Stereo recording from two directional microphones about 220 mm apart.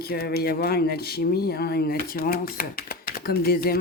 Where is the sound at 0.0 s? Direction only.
45° left (ahead or behind).